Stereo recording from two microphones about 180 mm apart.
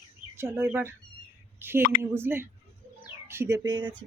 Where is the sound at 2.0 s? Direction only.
15° right (ahead or behind).